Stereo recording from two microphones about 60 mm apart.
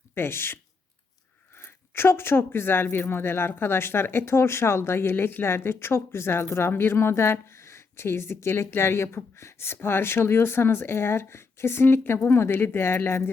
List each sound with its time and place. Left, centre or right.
0.1 s speech: left